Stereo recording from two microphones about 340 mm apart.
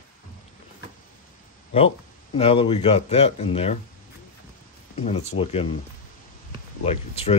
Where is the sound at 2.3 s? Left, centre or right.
Centre.